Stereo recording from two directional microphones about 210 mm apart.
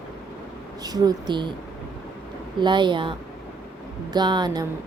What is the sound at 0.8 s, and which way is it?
Speech, 20° right (ahead or behind).